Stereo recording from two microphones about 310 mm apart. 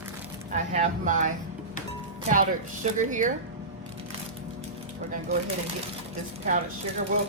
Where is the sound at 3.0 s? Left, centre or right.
Right.